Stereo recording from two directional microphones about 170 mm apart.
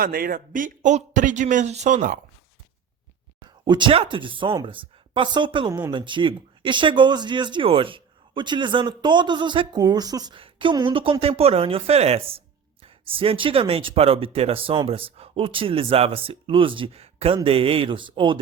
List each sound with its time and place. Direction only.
0.0 s speech: 60° right (ahead or behind)
3.6 s a woman's voice: 25° right (ahead or behind)